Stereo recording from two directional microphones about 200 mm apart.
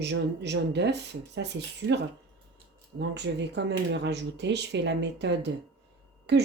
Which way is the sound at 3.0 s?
60° right (ahead or behind).